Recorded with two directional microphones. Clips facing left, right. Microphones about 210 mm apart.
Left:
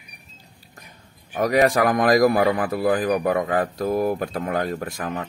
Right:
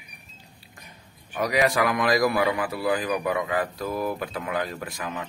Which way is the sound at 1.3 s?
45° left (ahead or behind).